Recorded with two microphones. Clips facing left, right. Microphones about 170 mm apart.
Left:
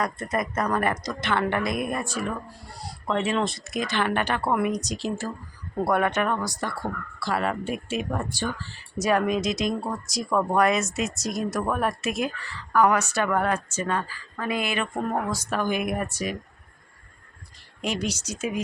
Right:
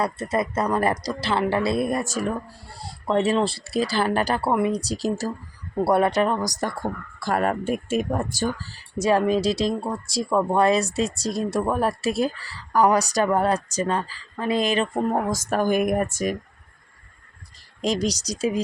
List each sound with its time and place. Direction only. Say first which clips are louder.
0.3 s speech: right 3 dB; 30° right (ahead or behind)
2.7 s speech: right 5 dB; 30° right (ahead or behind); by 16.4 s 45° right (ahead or behind)
17.8 s speech: right 5 dB; 35° right (ahead or behind)